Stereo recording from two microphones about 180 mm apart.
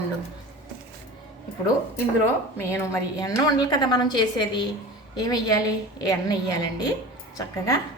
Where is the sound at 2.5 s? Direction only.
15° left (ahead or behind).